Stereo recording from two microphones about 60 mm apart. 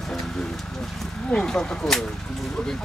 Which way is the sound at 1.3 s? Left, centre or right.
Centre.